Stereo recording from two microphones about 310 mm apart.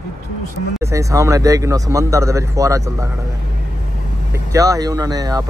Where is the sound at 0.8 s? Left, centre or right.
Centre.